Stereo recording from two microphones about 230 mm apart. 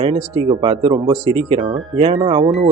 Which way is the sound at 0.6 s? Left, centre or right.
Right.